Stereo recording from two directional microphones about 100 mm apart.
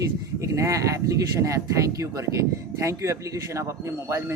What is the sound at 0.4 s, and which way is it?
Speech, 30° right (ahead or behind).